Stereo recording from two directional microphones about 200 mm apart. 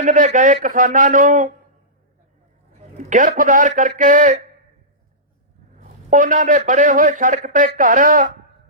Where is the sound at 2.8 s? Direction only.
35° right (ahead or behind).